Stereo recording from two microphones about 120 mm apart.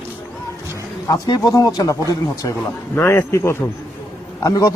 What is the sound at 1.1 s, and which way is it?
A man's voice, 30° left (ahead or behind).